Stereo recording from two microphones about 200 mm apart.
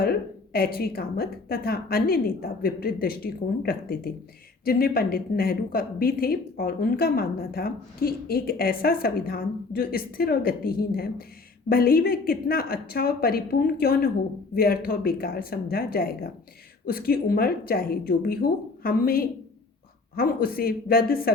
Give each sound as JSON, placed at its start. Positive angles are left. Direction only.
{"t": 0.0, "sound": "speech", "side_deg": 50}